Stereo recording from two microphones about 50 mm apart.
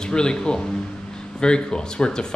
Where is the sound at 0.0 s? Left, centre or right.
Centre.